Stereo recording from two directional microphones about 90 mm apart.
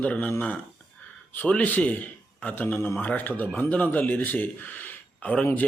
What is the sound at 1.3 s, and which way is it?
Speech, 15° left (ahead or behind).